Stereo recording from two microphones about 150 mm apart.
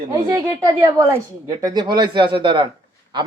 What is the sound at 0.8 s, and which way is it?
Speech, 20° right (ahead or behind).